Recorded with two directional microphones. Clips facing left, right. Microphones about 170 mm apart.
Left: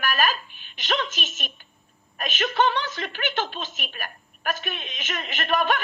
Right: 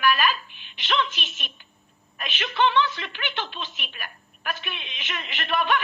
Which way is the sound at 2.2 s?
40° left (ahead or behind).